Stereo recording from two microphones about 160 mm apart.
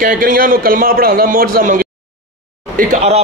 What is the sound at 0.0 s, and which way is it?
A man's voice, 60° right (ahead or behind).